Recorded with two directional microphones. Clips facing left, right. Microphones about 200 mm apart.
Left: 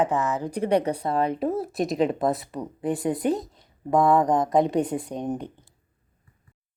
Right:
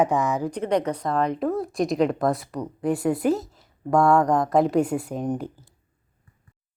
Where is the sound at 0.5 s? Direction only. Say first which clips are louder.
Left 1 dB; 10° left (ahead or behind).